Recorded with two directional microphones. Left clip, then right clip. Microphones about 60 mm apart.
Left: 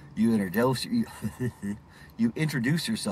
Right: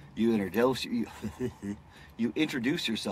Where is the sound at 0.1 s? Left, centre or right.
Centre.